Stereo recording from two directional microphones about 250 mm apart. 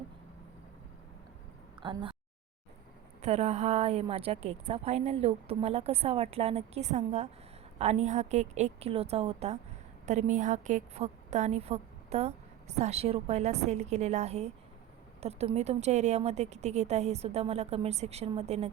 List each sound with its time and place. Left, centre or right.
1.8 s a woman's voice: centre
3.2 s a woman's voice: right